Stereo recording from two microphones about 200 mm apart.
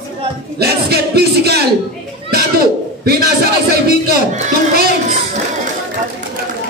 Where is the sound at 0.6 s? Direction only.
55° right (ahead or behind).